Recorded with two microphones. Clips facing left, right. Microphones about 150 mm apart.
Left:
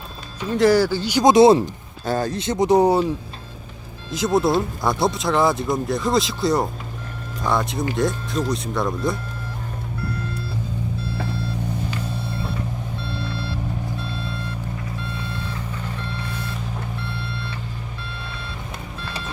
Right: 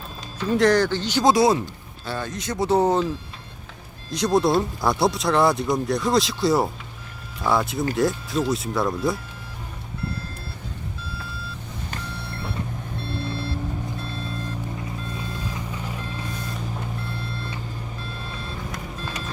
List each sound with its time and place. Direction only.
0.5 s speech: 5° left (ahead or behind); by 1.7 s 25° left (ahead or behind)
2.0 s speech: 40° left (ahead or behind); by 3.1 s 10° left (ahead or behind)
4.1 s speech: centre (ahead or behind)
13.0 s vehicle: 50° right (ahead or behind)
15.5 s reversing beeps: 15° right (ahead or behind)
17.1 s reversing beeps: 45° right (ahead or behind)